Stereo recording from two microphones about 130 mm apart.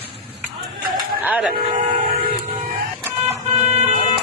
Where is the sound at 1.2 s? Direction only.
10° right (ahead or behind).